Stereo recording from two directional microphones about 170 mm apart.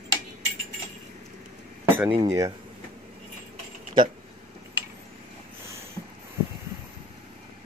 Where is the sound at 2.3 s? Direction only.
20° right (ahead or behind).